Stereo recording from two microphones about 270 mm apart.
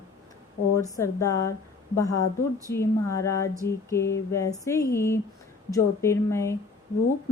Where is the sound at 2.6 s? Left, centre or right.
Centre.